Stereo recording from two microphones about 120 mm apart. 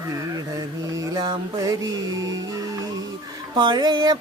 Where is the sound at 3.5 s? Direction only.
40° right (ahead or behind).